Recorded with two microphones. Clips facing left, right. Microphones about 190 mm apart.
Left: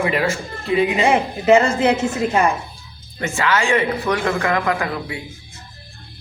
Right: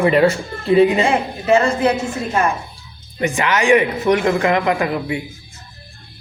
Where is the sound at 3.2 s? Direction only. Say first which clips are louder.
Right 2 dB; 15° right (ahead or behind).